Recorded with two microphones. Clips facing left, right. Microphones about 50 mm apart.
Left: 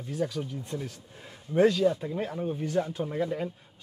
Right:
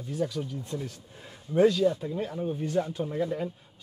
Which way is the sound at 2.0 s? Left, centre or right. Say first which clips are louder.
Even; left.